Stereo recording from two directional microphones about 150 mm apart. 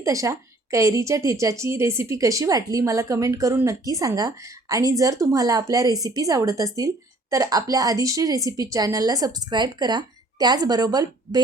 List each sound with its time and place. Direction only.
0.0 s a woman's voice: 20° right (ahead or behind)